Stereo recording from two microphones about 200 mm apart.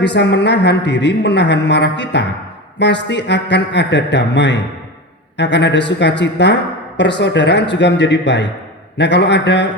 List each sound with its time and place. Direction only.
0.0 s speech: 60° left (ahead or behind)